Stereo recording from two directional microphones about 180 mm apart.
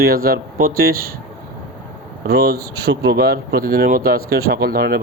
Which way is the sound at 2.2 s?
60° right (ahead or behind).